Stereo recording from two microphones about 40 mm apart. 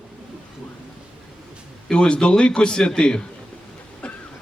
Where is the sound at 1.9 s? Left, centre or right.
Left.